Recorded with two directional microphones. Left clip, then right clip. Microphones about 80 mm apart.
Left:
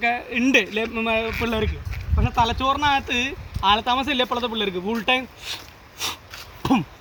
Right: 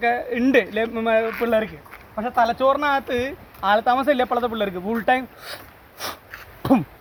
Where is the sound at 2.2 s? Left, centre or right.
Right.